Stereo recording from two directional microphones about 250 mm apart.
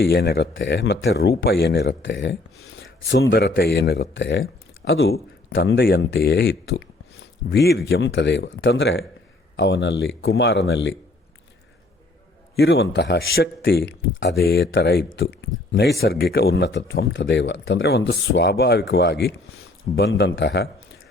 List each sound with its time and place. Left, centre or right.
0.0 s speech: left
12.5 s a man's voice: left